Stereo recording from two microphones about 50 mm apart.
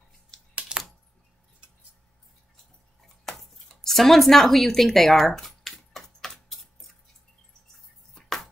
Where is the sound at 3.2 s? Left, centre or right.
Centre.